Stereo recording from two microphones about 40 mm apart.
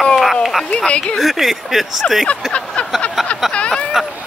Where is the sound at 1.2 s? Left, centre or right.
Centre.